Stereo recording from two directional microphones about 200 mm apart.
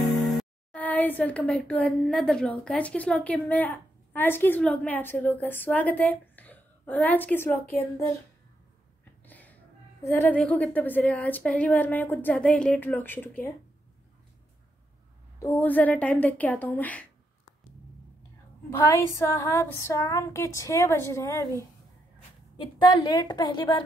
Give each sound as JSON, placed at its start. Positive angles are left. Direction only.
{"t": 0.4, "sound": "a woman's voice", "side_deg": 5}
{"t": 9.2, "sound": "music", "side_deg": 10}
{"t": 10.0, "sound": "a woman's voice", "side_deg": 10}
{"t": 15.5, "sound": "a woman's voice", "side_deg": 10}
{"t": 18.8, "sound": "a woman's voice", "side_deg": 15}
{"t": 22.8, "sound": "a woman's voice", "side_deg": 20}